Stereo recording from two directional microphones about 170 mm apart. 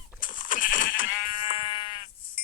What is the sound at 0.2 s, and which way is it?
Sheep, 50° left (ahead or behind).